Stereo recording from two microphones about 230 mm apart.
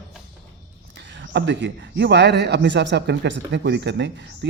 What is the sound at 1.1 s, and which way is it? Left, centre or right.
A man's voice, right.